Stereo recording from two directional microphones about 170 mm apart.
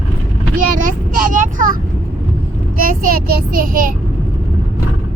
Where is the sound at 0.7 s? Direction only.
55° right (ahead or behind).